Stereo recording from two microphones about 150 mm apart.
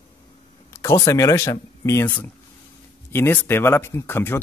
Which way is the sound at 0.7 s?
15° left (ahead or behind).